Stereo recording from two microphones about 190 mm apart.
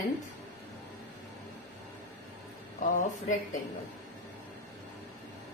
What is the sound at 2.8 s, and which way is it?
Speech, 45° left (ahead or behind).